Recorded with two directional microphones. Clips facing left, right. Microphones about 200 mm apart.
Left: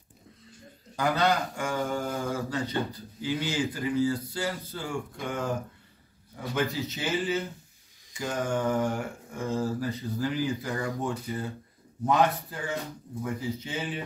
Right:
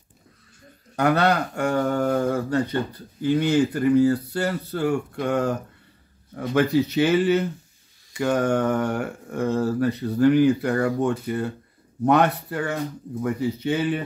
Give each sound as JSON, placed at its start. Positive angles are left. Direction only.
{"t": 0.9, "sound": "speech", "side_deg": -65}